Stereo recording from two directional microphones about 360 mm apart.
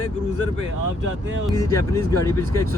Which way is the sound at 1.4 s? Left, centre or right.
Centre.